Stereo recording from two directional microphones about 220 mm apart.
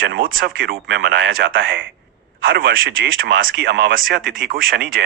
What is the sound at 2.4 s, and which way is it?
Speech, 45° right (ahead or behind).